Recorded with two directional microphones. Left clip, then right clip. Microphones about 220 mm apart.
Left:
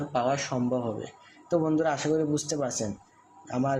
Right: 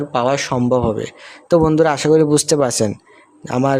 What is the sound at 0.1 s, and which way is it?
A man's voice, 55° right (ahead or behind).